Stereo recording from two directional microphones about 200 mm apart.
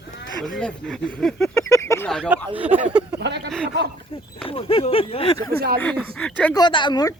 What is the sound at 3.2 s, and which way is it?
Speech, 55° right (ahead or behind).